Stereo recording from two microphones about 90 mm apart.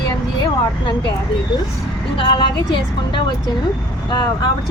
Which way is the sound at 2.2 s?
65° left (ahead or behind).